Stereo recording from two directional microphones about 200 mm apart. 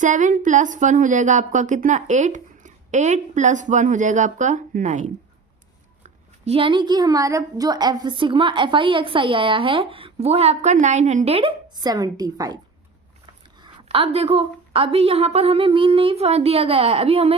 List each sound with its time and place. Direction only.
0.0 s a woman's voice: 40° right (ahead or behind); by 12.5 s 20° right (ahead or behind)
13.6 s a woman's voice: 25° right (ahead or behind)